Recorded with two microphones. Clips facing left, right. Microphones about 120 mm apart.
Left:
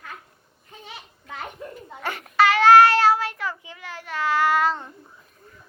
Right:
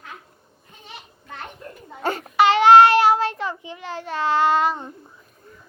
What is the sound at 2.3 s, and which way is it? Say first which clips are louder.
Child singing: right 2 dB; 20° right (ahead or behind).